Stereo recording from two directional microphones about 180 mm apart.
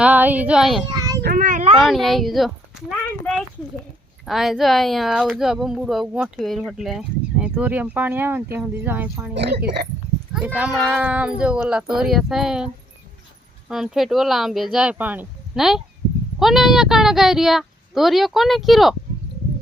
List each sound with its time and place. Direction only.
0.0 s speech: 10° right (ahead or behind)
0.9 s child singing: 20° right (ahead or behind)
1.2 s a child's voice: 55° right (ahead or behind)
1.8 s speech: centre (ahead or behind)
9.3 s speech: 70° right (ahead or behind)
10.3 s speech: 10° right (ahead or behind)